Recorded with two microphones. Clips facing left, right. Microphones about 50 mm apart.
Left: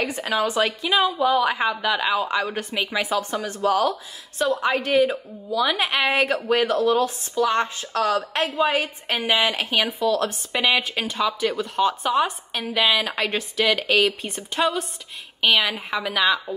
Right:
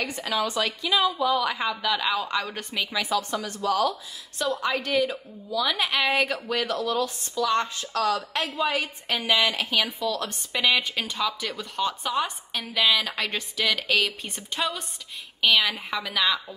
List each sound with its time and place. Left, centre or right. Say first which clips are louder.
0.0 s a woman's voice: left 4 dB; left
3.3 s a woman's voice: left 6 dB; left; by 16.3 s centre